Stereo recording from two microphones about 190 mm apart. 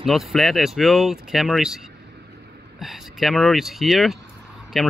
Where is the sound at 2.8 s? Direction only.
Centre (ahead or behind).